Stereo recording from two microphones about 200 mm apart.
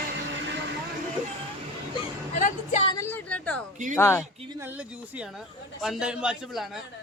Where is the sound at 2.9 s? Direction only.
10° left (ahead or behind).